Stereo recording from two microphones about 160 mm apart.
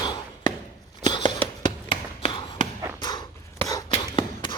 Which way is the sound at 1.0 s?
30° left (ahead or behind).